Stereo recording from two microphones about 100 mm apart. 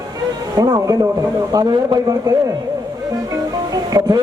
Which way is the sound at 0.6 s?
40° right (ahead or behind).